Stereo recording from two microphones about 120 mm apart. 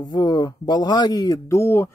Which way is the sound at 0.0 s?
35° left (ahead or behind).